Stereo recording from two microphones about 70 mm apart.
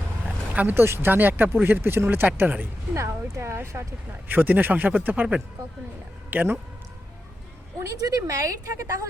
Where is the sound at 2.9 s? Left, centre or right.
Right.